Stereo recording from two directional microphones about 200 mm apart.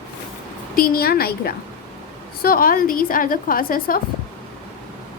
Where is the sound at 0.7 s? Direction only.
45° left (ahead or behind).